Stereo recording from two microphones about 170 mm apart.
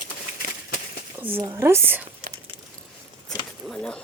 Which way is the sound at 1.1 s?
10° right (ahead or behind).